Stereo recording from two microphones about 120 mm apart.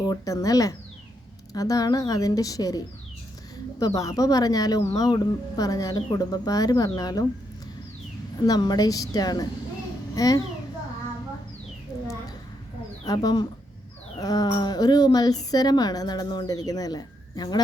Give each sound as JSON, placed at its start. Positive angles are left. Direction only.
{"t": 0.0, "sound": "a woman's voice", "side_deg": 30}
{"t": 8.4, "sound": "a woman's voice", "side_deg": 35}
{"t": 13.1, "sound": "a woman's voice", "side_deg": 35}